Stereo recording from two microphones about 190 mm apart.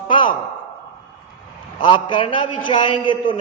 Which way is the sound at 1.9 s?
25° left (ahead or behind).